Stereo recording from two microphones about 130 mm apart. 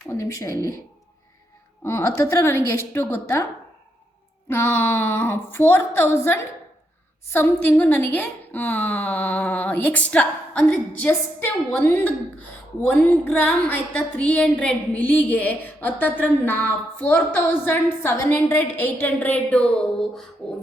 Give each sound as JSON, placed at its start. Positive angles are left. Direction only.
{"t": 0.2, "sound": "a woman's voice", "side_deg": 25}
{"t": 1.8, "sound": "a woman's voice", "side_deg": 20}
{"t": 4.5, "sound": "a woman's voice", "side_deg": 15}